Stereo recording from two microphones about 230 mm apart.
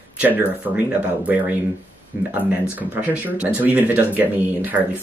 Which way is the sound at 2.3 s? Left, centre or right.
Centre.